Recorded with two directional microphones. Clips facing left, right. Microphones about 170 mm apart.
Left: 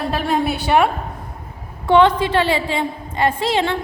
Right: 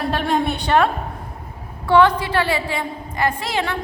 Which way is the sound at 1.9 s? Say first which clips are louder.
Left 2 dB; 25° left (ahead or behind).